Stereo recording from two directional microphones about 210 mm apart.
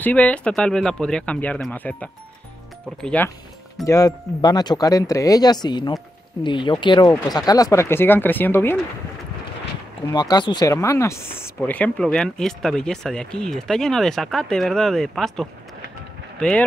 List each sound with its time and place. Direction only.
0.0 s speech: 5° left (ahead or behind)
10.1 s speech: 20° left (ahead or behind)